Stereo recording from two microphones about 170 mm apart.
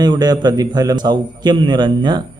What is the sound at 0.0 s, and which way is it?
Speech, 25° right (ahead or behind).